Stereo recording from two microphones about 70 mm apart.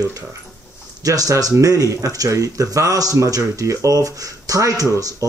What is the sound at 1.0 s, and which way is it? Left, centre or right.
Speech, right.